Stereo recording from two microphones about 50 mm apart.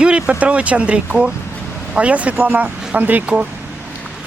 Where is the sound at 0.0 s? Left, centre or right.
Right.